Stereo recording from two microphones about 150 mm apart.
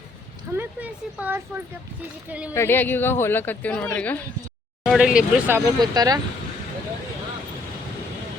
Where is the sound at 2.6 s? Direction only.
15° left (ahead or behind).